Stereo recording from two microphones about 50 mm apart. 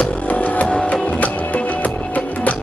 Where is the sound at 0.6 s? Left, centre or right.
Centre.